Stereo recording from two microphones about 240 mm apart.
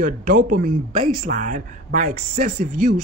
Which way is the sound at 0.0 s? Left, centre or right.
Right.